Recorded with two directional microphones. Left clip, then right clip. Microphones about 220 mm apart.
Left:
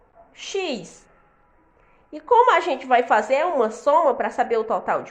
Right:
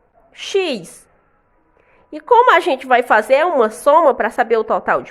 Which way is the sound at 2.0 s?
40° right (ahead or behind).